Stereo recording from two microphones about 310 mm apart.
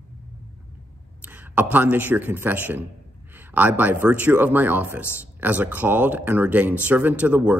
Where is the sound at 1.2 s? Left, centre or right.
Centre.